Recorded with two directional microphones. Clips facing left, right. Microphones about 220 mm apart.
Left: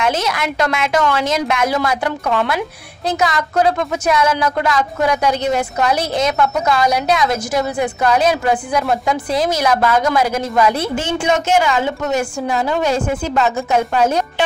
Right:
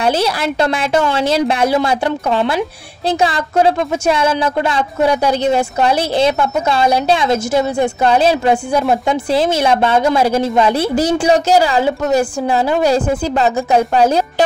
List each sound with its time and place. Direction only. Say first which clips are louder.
0.0 s a woman's voice: right 3 dB; 30° right (ahead or behind)